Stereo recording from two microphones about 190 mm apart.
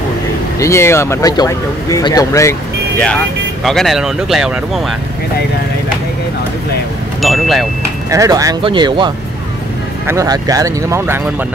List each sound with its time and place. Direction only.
0.6 s speech: 15° left (ahead or behind)
3.6 s speech: centre (ahead or behind)
7.2 s speech: centre (ahead or behind)
8.1 s speech: 15° right (ahead or behind)